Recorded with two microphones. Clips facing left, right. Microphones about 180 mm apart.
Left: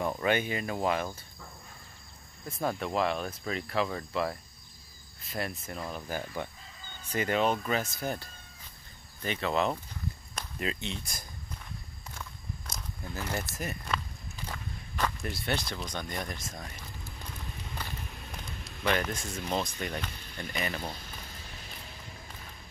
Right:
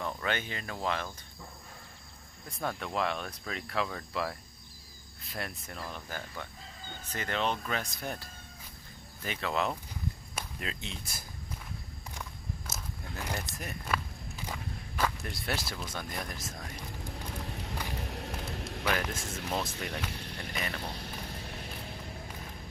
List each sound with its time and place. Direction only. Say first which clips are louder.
0.0 s cricket: left 6 dB; 15° left (ahead or behind)
2.8 s speech: left 3 dB; centre (ahead or behind)
7.1 s cricket: left 5 dB; 10° left (ahead or behind)
7.6 s speech: left 4 dB; 5° left (ahead or behind)
12.1 s walk: right 1 dB; 10° right (ahead or behind)
17.0 s a sound: right 6 dB; 70° right (ahead or behind)
18.9 s speech: left 3 dB; 5° right (ahead or behind)
20.1 s a sound: right 5 dB; 70° right (ahead or behind)
20.5 s speech: left 3 dB; centre (ahead or behind)
20.9 s a sound: right 4 dB; 65° right (ahead or behind)